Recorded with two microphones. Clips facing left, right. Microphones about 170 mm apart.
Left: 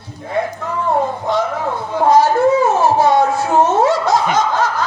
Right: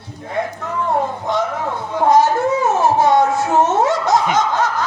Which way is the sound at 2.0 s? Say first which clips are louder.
Left 2 dB; 20° right (ahead or behind).